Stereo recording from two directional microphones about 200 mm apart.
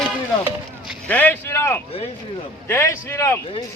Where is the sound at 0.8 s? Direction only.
10° left (ahead or behind).